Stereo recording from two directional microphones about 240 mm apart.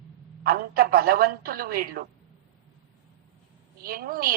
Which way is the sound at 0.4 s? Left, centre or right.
Right.